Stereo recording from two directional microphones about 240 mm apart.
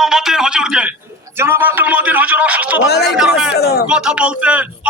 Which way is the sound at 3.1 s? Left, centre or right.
Centre.